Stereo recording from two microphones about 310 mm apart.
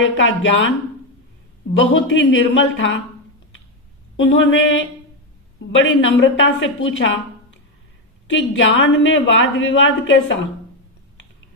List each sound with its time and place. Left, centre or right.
0.0 s a woman's voice: left
1.9 s a woman's voice: left
4.2 s a woman's voice: left
8.3 s a woman's voice: left